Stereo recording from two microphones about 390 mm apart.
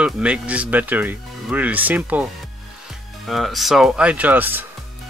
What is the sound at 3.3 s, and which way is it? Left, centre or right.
Speech, centre.